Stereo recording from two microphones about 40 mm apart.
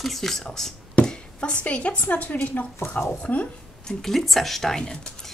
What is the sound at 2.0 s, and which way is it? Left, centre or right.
Speech, left.